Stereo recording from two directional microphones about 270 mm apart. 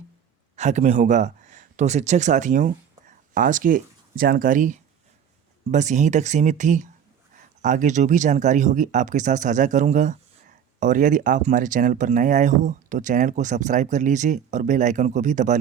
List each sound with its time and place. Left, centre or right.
0.5 s speech: right